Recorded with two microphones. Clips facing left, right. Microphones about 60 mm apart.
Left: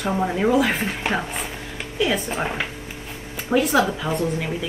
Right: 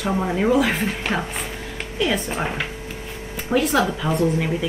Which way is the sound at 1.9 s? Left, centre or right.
Centre.